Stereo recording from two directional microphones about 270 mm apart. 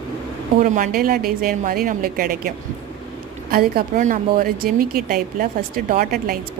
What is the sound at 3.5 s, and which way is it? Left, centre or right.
A woman's voice, right.